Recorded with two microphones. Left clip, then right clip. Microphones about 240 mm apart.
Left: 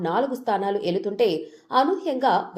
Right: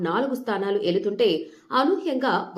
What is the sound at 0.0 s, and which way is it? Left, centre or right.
A woman's voice, centre.